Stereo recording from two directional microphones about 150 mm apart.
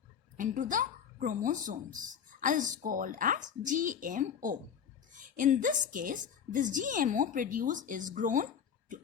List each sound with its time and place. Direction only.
0.3 s speech: 60° right (ahead or behind)